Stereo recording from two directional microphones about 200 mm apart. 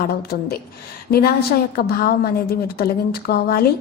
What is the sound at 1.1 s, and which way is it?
A woman's voice, 50° left (ahead or behind).